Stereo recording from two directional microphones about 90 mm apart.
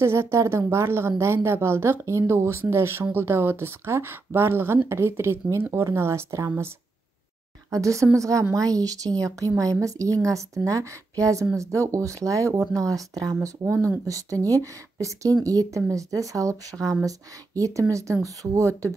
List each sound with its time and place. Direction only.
0.0 s a woman's voice: 30° right (ahead or behind)
7.7 s speech: 35° right (ahead or behind)